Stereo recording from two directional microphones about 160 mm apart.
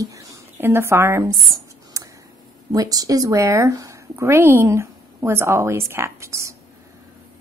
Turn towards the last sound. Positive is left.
turn(degrees=-20)  # may be behind; listen again after turning